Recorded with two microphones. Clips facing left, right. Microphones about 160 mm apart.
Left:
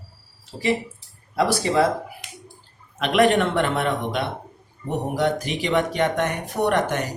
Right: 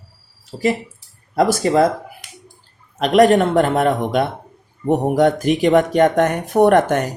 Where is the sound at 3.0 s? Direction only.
40° right (ahead or behind).